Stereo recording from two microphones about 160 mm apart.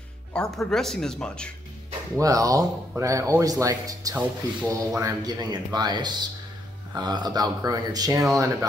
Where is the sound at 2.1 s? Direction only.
20° right (ahead or behind).